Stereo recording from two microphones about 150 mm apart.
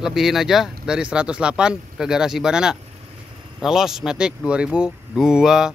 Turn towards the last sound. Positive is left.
turn(degrees=-5)  # may be behind; listen again after turning